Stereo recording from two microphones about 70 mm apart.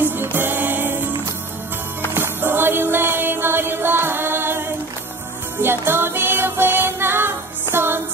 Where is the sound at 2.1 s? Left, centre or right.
Right.